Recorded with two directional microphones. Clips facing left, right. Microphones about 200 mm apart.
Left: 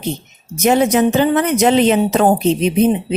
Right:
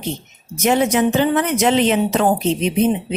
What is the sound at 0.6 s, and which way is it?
Speech, 40° left (ahead or behind).